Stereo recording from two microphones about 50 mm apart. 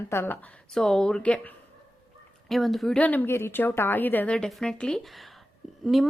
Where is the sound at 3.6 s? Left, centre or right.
Left.